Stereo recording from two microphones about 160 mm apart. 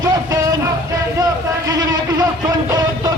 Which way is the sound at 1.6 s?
25° right (ahead or behind).